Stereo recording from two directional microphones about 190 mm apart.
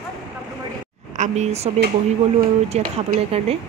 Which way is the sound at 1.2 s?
35° right (ahead or behind).